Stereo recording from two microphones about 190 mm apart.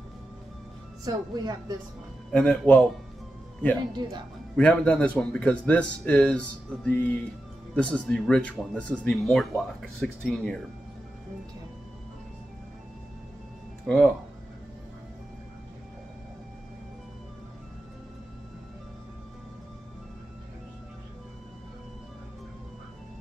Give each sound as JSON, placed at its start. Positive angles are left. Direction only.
{"t": 1.0, "sound": "speech", "side_deg": -20}
{"t": 2.3, "sound": "speech", "side_deg": 5}
{"t": 4.0, "sound": "speech", "side_deg": -20}
{"t": 4.6, "sound": "speech", "side_deg": 5}
{"t": 13.8, "sound": "speech", "side_deg": 5}